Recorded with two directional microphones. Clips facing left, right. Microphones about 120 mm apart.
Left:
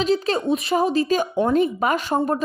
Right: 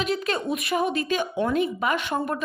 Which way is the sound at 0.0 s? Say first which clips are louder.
Left 5 dB; 30° left (ahead or behind).